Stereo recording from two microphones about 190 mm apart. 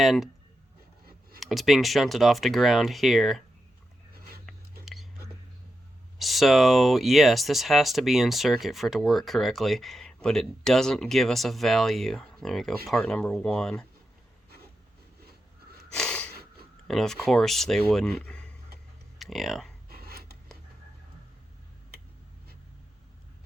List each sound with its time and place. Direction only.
0.0 s speech: centre (ahead or behind)
1.4 s speech: centre (ahead or behind)
4.1 s a sound: 50° right (ahead or behind)
6.1 s speech: centre (ahead or behind)
16.0 s snort: 5° left (ahead or behind)
16.9 s speech: centre (ahead or behind)
19.9 s a sound: 55° right (ahead or behind)